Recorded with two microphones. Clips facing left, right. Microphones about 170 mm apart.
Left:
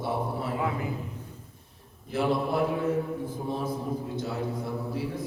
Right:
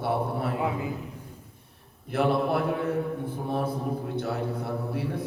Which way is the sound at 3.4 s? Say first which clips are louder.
Right 4 dB; 60° right (ahead or behind).